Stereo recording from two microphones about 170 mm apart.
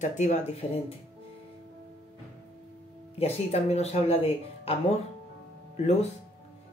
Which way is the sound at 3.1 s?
40° left (ahead or behind).